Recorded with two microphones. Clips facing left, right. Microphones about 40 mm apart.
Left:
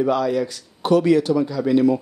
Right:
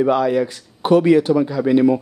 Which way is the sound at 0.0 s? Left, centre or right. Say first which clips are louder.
Right 3 dB; right.